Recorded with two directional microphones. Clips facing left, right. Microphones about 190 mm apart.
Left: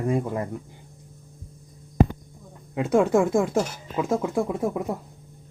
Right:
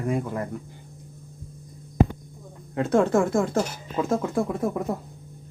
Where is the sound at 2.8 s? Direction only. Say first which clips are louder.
Left 1 dB; 10° left (ahead or behind).